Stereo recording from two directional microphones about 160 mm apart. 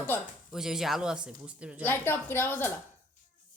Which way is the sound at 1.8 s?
15° left (ahead or behind).